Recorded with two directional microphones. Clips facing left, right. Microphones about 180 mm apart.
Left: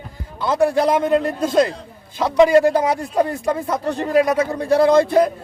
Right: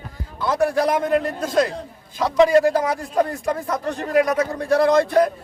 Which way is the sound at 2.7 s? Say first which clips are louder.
Left 3 dB; 25° left (ahead or behind).